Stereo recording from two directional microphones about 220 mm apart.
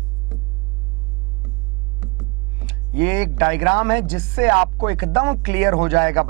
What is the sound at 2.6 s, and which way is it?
Speech, 10° right (ahead or behind).